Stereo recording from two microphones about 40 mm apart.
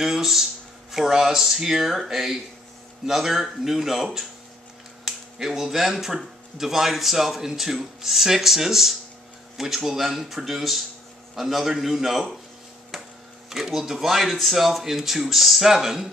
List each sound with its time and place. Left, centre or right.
0.0 s speech: centre
13.5 s speech: centre